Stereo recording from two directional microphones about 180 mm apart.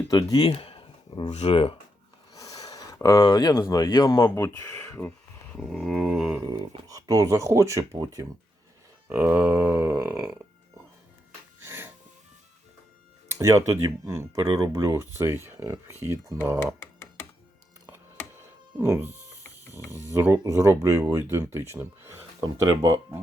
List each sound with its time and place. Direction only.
0.1 s speech: 20° left (ahead or behind)
2.3 s speech: 20° left (ahead or behind); by 6.4 s centre (ahead or behind)
6.4 s speech: 20° right (ahead or behind)
9.0 s speech: 10° right (ahead or behind)
11.6 s wheeze: 15° right (ahead or behind)
13.4 s speech: 15° right (ahead or behind)
16.8 s a sound: 10° left (ahead or behind)
18.3 s insect: 15° right (ahead or behind)
20.1 s speech: 15° right (ahead or behind)